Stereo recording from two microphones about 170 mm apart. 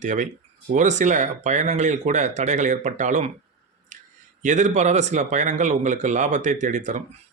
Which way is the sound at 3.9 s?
50° right (ahead or behind).